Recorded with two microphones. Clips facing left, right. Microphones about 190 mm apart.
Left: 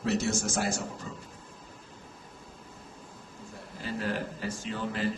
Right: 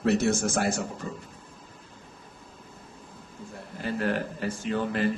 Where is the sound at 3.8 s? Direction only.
60° right (ahead or behind).